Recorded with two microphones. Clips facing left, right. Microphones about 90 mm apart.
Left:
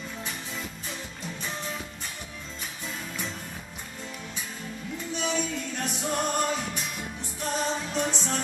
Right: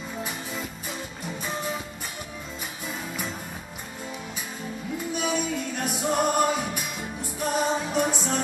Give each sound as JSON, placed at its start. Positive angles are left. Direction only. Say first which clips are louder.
{"t": 0.2, "sound": "music", "louder": "right 5 dB", "side_deg": -10}
{"t": 2.9, "sound": "music", "louder": "right 3 dB", "side_deg": -10}
{"t": 4.9, "sound": "music", "louder": "right 2 dB", "side_deg": -10}